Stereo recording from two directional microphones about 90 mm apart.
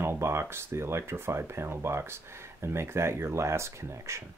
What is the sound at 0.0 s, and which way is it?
Speech, 30° right (ahead or behind).